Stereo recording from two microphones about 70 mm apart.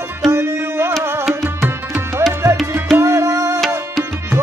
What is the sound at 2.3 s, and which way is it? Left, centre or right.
Music, right.